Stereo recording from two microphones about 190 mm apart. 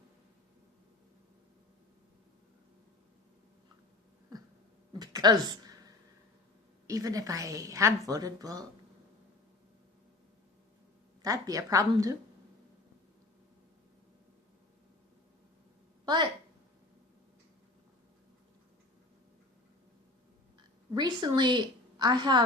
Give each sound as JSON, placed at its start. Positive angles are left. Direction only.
{"t": 4.9, "sound": "a sound", "side_deg": -20}
{"t": 6.8, "sound": "a woman's voice", "side_deg": -20}
{"t": 11.2, "sound": "a woman's voice", "side_deg": -20}
{"t": 20.9, "sound": "a woman's voice", "side_deg": -20}